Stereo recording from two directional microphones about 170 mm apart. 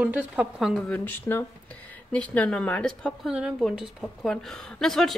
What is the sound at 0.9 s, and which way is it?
Speech, 10° left (ahead or behind).